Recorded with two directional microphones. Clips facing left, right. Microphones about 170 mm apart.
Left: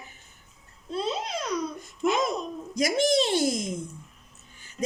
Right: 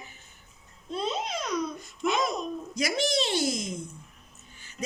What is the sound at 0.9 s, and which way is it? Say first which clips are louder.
Speech: left 1 dB; 5° left (ahead or behind).